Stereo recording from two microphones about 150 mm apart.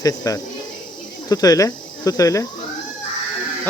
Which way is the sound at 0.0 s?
25° left (ahead or behind).